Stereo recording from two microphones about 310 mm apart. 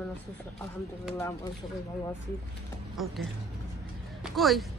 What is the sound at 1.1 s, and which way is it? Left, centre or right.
Speech, centre.